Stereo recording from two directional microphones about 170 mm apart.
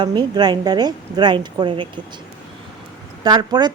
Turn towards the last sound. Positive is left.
turn(degrees=-25)  # may be behind; listen again after turning